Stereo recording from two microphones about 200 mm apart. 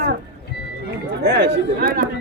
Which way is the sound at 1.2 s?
55° right (ahead or behind).